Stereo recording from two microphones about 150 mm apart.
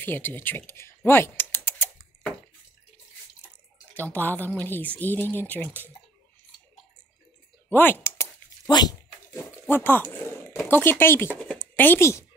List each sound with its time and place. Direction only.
0.0 s speech: 15° left (ahead or behind)
3.9 s a woman's voice: 10° left (ahead or behind)
7.7 s a sound: 15° left (ahead or behind)
9.5 s speech: 15° left (ahead or behind)